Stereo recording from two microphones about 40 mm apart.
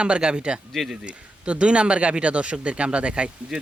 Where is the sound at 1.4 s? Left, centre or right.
Right.